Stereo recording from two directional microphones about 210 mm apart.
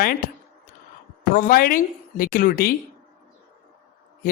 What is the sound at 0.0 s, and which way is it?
Speech, 45° left (ahead or behind).